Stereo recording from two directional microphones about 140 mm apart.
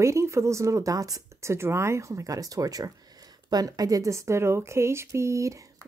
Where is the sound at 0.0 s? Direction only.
20° right (ahead or behind).